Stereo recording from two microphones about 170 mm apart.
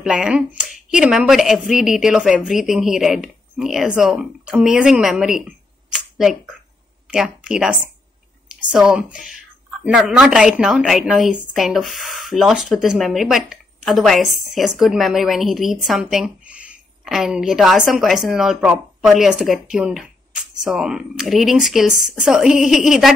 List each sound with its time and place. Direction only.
0.0 s speech: 5° right (ahead or behind)
5.9 s a sound: 5° right (ahead or behind)
7.1 s a woman's voice: 5° right (ahead or behind)